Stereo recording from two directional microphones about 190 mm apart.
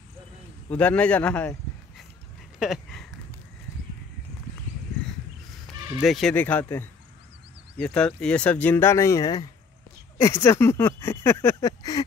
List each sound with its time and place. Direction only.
0.7 s speech: 5° left (ahead or behind)
2.6 s a sound: centre (ahead or behind)
5.9 s speech: centre (ahead or behind); by 12.0 s 20° left (ahead or behind)